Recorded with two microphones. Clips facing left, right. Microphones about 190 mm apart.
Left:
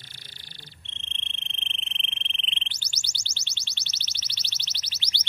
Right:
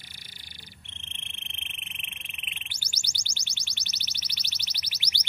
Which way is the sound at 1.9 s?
10° right (ahead or behind).